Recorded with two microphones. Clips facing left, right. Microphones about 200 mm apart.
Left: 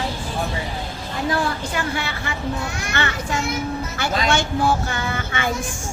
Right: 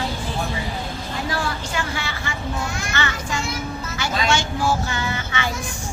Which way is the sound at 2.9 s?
60° left (ahead or behind).